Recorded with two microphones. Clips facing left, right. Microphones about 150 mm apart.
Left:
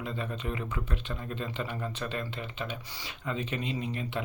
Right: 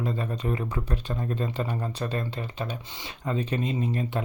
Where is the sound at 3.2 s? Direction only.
40° right (ahead or behind).